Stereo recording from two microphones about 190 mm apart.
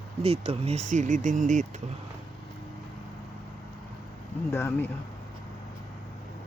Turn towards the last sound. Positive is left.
turn(degrees=15)  # may be behind; listen again after turning